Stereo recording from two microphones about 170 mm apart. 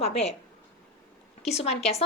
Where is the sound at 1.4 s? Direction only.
40° left (ahead or behind).